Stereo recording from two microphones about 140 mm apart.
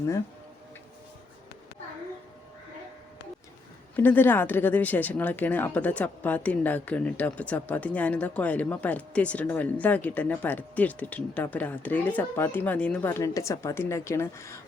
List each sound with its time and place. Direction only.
3.9 s speech: 15° left (ahead or behind)
13.1 s a woman's voice: 20° left (ahead or behind)